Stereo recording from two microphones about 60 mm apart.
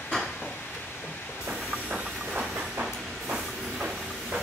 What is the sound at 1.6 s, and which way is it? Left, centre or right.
Train, centre.